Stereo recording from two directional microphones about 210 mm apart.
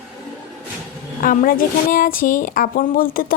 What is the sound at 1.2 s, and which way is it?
A woman's voice, 40° left (ahead or behind).